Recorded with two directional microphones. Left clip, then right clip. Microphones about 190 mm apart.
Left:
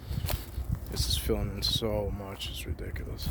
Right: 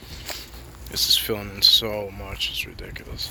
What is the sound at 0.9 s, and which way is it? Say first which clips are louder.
Speech: right 11 dB; 5° left (ahead or behind).